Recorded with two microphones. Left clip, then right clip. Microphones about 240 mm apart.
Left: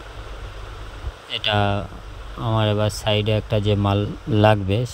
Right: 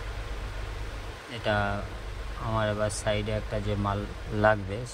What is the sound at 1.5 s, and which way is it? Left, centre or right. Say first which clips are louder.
Speech: left 6 dB; left.